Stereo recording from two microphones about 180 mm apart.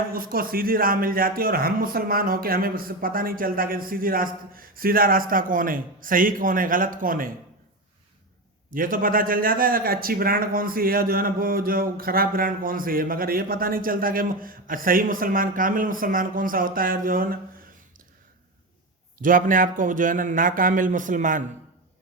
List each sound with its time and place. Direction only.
0.1 s speech: 55° right (ahead or behind)
8.7 s speech: 50° right (ahead or behind)
19.2 s speech: 50° right (ahead or behind)